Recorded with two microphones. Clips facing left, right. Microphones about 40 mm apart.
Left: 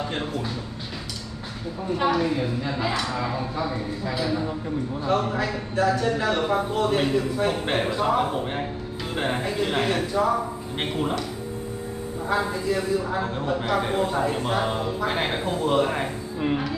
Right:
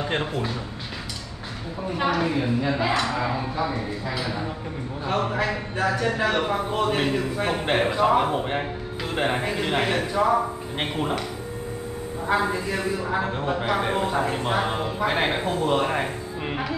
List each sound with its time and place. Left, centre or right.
0.1 s speech: right
2.1 s a man's voice: centre
5.0 s a man's voice: centre
12.3 s a man's voice: right